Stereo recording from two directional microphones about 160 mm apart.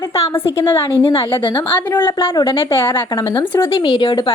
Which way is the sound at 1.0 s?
35° left (ahead or behind).